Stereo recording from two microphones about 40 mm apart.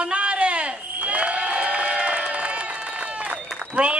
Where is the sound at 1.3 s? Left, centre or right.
Right.